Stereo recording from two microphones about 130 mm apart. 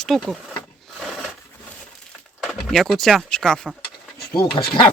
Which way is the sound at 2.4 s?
Centre (ahead or behind).